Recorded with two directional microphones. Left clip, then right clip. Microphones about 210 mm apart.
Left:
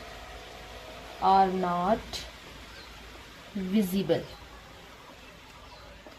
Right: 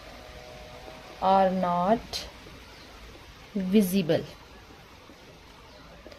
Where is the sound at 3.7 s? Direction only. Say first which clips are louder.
Right 3 dB; 55° right (ahead or behind).